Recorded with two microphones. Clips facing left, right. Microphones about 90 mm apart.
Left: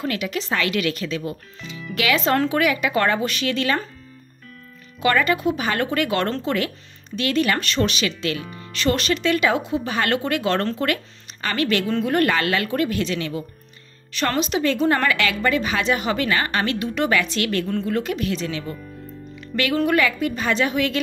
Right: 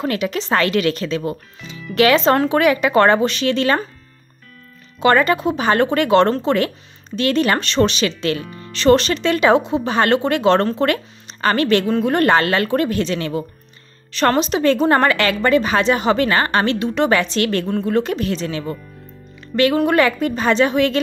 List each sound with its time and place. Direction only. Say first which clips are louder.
0.0 s a woman's voice: right 4 dB; 35° right (ahead or behind)
5.0 s a woman's voice: right 4 dB; 35° right (ahead or behind)